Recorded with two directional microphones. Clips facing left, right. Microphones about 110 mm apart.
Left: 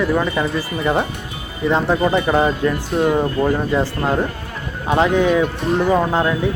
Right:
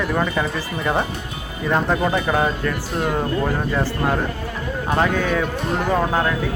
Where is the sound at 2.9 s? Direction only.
5° left (ahead or behind).